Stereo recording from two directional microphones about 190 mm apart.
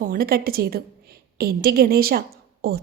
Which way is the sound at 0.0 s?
50° right (ahead or behind).